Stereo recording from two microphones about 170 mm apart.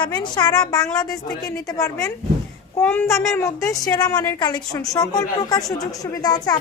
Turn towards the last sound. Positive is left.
turn(degrees=25)  # may be behind; listen again after turning